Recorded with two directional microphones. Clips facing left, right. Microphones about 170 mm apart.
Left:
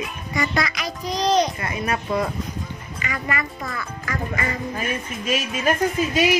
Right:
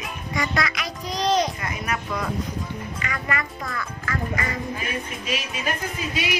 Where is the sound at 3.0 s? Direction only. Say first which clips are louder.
Left 3 dB; 5° left (ahead or behind).